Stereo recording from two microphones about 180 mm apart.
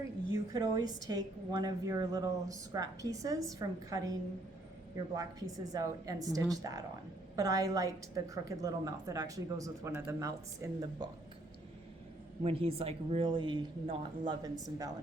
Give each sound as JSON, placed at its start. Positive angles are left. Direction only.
{"t": 0.5, "sound": "a woman's voice", "side_deg": -20}
{"t": 12.4, "sound": "a woman's voice", "side_deg": -30}